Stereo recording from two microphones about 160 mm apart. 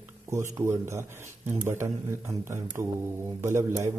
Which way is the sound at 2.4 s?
15° right (ahead or behind).